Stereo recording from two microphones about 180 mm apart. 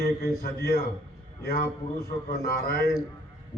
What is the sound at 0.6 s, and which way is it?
Speech, 60° left (ahead or behind).